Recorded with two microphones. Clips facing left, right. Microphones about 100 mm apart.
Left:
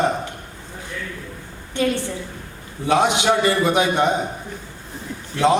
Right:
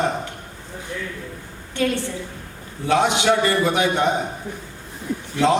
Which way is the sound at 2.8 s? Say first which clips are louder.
Even; 20° left (ahead or behind).